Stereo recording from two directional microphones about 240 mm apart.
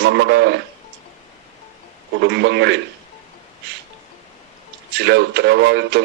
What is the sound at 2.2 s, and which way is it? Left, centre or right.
Speech, right.